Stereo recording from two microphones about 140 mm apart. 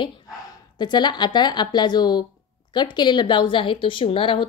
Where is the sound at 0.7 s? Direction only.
30° left (ahead or behind).